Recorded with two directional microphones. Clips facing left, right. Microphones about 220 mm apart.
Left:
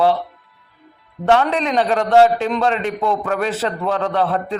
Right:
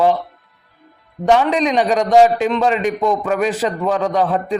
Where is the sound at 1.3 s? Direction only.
15° right (ahead or behind).